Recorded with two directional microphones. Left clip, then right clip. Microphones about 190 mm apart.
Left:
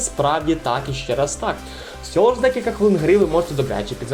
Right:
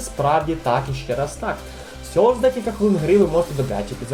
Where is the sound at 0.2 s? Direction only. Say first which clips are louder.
Even; 20° left (ahead or behind).